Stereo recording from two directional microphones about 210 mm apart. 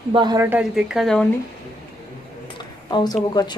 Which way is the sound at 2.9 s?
20° left (ahead or behind).